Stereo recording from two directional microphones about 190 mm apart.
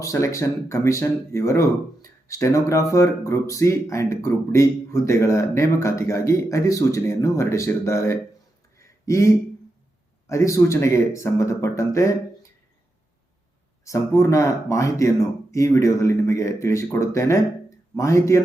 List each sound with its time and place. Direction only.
0.0 s speech: 15° left (ahead or behind)
8.8 s a sound: 15° left (ahead or behind)
10.2 s speech: 15° left (ahead or behind)
13.8 s speech: 15° left (ahead or behind)